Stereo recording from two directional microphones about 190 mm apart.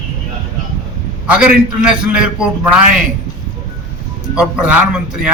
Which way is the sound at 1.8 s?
5° right (ahead or behind).